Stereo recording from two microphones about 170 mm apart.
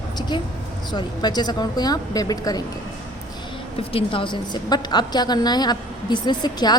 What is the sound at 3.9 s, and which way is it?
A woman's voice, 30° left (ahead or behind).